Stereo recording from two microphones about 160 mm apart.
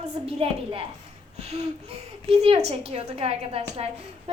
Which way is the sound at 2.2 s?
35° right (ahead or behind).